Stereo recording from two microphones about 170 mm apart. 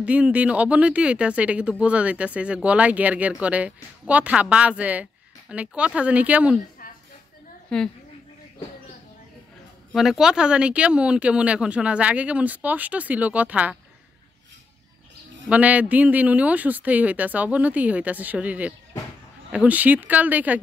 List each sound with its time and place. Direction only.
0.0 s speech: 10° right (ahead or behind)
6.8 s a sound: 60° left (ahead or behind)
7.7 s a woman's voice: 5° left (ahead or behind)
9.9 s speech: centre (ahead or behind)
15.4 s speech: 10° right (ahead or behind)